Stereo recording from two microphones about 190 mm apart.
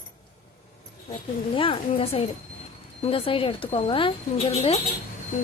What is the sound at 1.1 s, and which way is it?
Speech, 25° left (ahead or behind).